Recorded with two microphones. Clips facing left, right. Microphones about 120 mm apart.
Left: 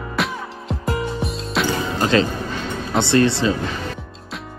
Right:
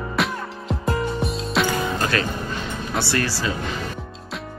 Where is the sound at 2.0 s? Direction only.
25° left (ahead or behind).